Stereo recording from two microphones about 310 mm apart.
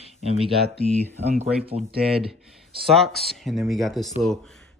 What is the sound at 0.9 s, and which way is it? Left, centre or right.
Speech, centre.